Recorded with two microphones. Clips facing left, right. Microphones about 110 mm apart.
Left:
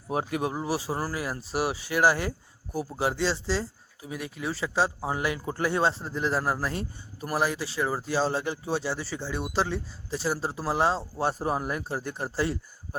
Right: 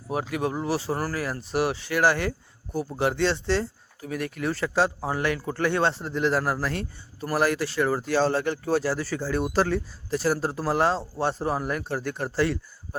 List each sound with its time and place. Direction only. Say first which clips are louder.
0.1 s speech: even; 30° left (ahead or behind)
0.4 s speech: right 3 dB; 10° left (ahead or behind)
5.0 s speech: right 2 dB; 10° left (ahead or behind)